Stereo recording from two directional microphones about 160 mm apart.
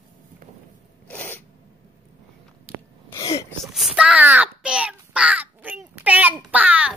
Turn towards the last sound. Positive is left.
turn(degrees=-10)  # may be behind; listen again after turning